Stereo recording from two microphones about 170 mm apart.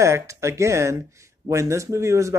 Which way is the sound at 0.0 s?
15° right (ahead or behind).